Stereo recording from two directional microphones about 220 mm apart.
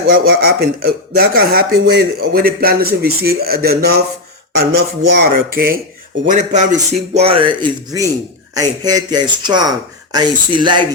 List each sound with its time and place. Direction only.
0.1 s a man's voice: 45° right (ahead or behind); by 10.8 s 20° right (ahead or behind)